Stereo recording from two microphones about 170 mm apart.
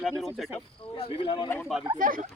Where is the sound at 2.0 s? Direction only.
55° right (ahead or behind).